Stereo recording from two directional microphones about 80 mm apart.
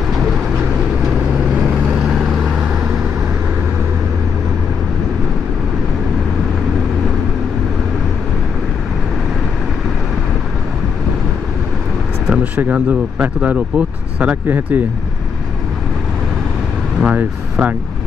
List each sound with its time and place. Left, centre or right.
2.0 s vehicle: centre
12.3 s speech: centre
17.0 s speech: centre